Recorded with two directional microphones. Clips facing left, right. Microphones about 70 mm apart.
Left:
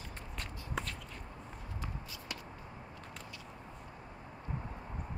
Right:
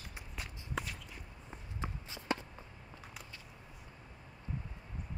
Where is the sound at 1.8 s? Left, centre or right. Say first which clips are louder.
Right 4 dB; right.